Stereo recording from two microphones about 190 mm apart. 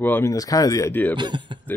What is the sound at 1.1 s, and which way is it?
Speech, 25° right (ahead or behind).